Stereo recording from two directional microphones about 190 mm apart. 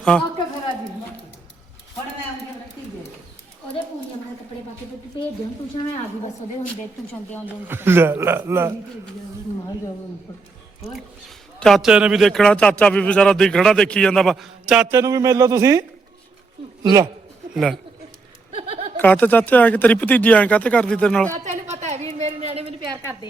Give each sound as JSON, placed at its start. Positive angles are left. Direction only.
{"t": 5.7, "sound": "a woman's voice", "side_deg": 25}
{"t": 7.4, "sound": "speech", "side_deg": -10}
{"t": 11.6, "sound": "speech", "side_deg": 0}
{"t": 14.9, "sound": "speech", "side_deg": -15}
{"t": 16.8, "sound": "speech", "side_deg": -20}
{"t": 17.5, "sound": "speech", "side_deg": 0}
{"t": 18.5, "sound": "a sound", "side_deg": -30}
{"t": 18.9, "sound": "speech", "side_deg": 10}
{"t": 21.3, "sound": "a sound", "side_deg": -40}